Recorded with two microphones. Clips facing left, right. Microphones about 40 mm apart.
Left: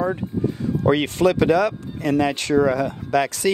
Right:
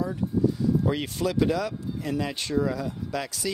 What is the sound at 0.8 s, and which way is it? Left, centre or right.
Speech, left.